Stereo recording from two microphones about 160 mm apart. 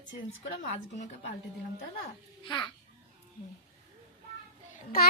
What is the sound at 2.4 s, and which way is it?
Speech, 30° left (ahead or behind).